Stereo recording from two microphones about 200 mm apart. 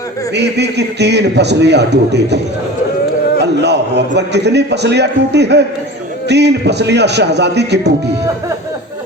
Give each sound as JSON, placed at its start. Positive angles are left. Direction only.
{"t": 0.3, "sound": "a man's voice", "side_deg": -55}
{"t": 3.4, "sound": "a man's voice", "side_deg": -60}